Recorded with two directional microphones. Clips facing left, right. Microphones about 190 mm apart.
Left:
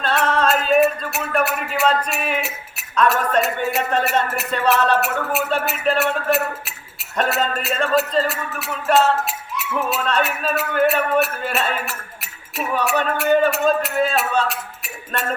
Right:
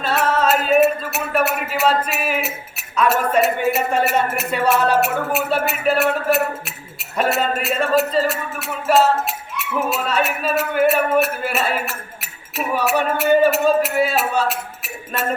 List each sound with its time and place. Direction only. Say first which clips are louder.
0.0 s music: right 1 dB; 5° right (ahead or behind)
1.6 s a man's voice: right 1 dB; centre (ahead or behind)